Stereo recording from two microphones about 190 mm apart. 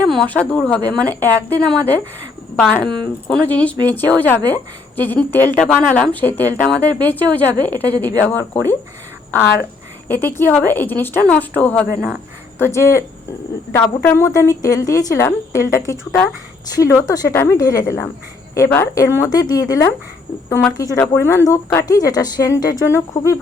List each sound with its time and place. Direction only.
0.1 s a woman's voice: 5° left (ahead or behind)
10.1 s a woman's voice: 10° left (ahead or behind)
20.5 s a woman's voice: 10° left (ahead or behind)